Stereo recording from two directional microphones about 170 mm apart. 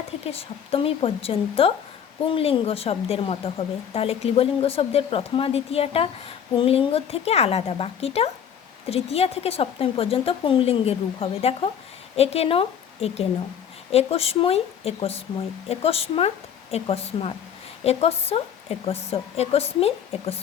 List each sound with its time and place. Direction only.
0.3 s a woman's voice: 35° left (ahead or behind)